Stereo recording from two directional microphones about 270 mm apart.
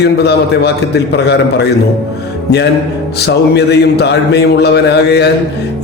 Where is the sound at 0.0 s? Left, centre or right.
Left.